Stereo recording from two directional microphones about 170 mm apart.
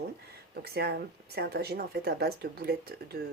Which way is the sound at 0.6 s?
70° right (ahead or behind).